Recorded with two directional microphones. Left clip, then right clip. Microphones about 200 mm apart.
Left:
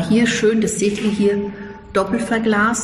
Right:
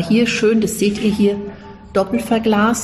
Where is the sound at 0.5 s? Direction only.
15° right (ahead or behind).